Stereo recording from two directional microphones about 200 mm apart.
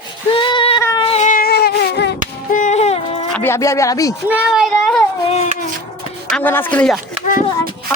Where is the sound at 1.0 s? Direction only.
35° left (ahead or behind); by 2.1 s 55° left (ahead or behind).